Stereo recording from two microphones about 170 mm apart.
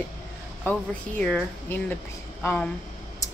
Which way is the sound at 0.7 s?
5° left (ahead or behind).